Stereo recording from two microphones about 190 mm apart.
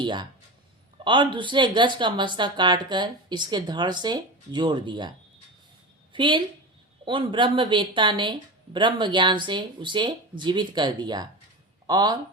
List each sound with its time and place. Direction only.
0.0 s speech: 25° right (ahead or behind)
6.1 s speech: 25° right (ahead or behind)